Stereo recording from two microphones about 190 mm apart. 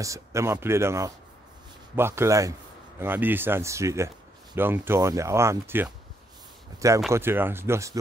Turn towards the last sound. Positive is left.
turn(degrees=-15)  # may be behind; listen again after turning